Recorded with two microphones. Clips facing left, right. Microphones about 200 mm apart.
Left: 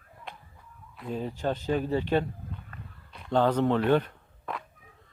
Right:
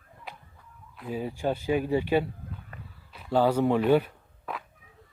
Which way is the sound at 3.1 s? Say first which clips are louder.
Right 1 dB; 5° right (ahead or behind).